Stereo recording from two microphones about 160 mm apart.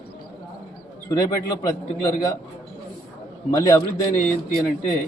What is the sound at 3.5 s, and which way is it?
Speech, 20° left (ahead or behind).